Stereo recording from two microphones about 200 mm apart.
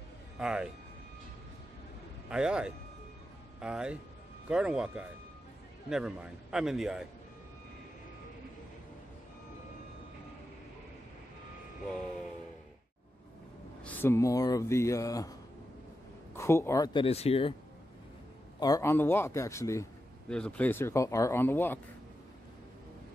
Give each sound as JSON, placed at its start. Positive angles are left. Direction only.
{"t": 0.4, "sound": "speech", "side_deg": -5}
{"t": 2.2, "sound": "a man's voice", "side_deg": -5}
{"t": 13.8, "sound": "speech", "side_deg": 10}
{"t": 16.3, "sound": "speech", "side_deg": 15}
{"t": 18.6, "sound": "speech", "side_deg": 15}